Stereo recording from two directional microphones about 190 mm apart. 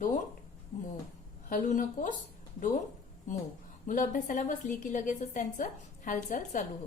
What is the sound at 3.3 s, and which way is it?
A woman's voice, 40° left (ahead or behind).